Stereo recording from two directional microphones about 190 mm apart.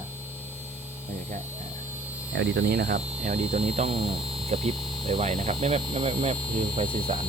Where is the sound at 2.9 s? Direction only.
35° right (ahead or behind).